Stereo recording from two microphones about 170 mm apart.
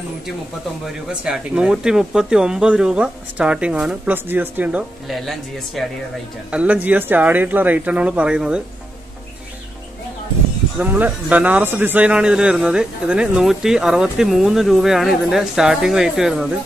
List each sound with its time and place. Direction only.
1.0 s speech: 5° right (ahead or behind)
10.8 s speech: 10° right (ahead or behind)